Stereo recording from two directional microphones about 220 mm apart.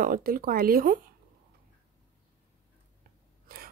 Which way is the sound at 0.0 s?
40° right (ahead or behind).